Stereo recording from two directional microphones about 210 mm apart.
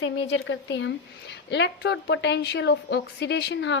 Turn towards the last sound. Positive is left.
turn(degrees=55)  # may be behind; listen again after turning